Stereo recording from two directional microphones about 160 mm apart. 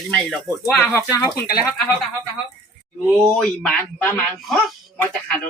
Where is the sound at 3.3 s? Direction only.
5° left (ahead or behind).